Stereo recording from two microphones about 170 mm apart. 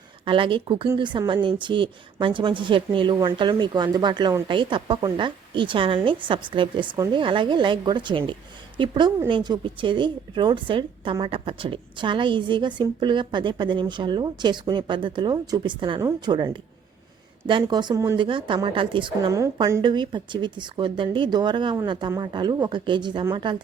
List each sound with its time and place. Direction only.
0.3 s a woman's voice: 30° right (ahead or behind)
18.2 s a woman's voice: 30° right (ahead or behind)